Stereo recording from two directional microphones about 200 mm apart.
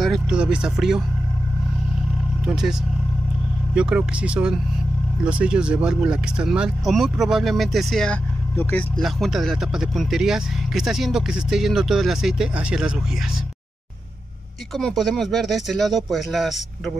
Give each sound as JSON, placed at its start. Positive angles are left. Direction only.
{"t": 0.0, "sound": "speech", "side_deg": 0}
{"t": 2.4, "sound": "speech", "side_deg": -5}
{"t": 3.7, "sound": "speech", "side_deg": -5}
{"t": 14.7, "sound": "speech", "side_deg": 0}